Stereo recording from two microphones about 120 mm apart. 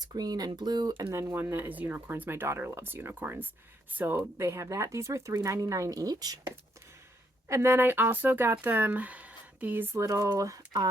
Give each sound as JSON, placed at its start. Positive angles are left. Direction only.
{"t": 0.0, "sound": "speech", "side_deg": -35}
{"t": 1.1, "sound": "speech", "side_deg": -20}
{"t": 7.4, "sound": "speech", "side_deg": -20}